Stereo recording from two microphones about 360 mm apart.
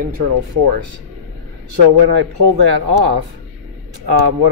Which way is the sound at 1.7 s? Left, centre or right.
Right.